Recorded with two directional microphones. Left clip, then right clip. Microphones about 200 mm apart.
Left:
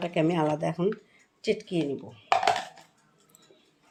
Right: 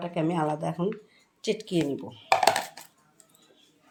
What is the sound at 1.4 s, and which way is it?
Speech, centre (ahead or behind).